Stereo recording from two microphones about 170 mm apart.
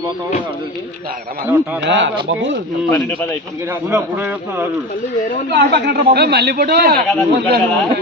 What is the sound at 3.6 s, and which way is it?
A man's voice, 15° right (ahead or behind).